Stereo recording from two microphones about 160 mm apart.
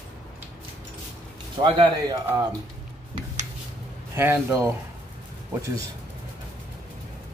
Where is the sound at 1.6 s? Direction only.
30° right (ahead or behind).